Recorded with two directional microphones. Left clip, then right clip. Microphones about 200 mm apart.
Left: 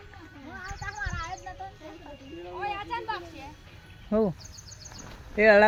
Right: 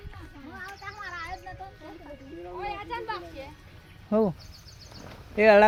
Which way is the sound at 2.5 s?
20° left (ahead or behind).